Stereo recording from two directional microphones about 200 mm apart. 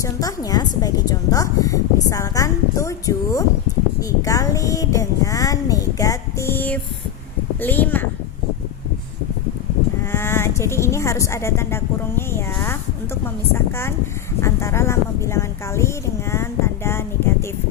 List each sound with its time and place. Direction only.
0.0 s a woman's voice: 15° left (ahead or behind)
10.0 s a woman's voice: 10° left (ahead or behind)